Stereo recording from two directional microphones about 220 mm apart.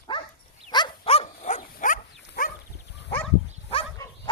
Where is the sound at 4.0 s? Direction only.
15° left (ahead or behind).